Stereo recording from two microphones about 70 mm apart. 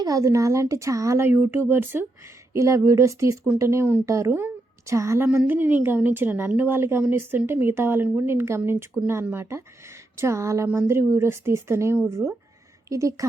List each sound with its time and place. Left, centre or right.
0.0 s speech: right
1.3 s speech: right
2.5 s speech: right
4.3 s a woman's voice: right
4.9 s speech: right
5.5 s a woman's voice: right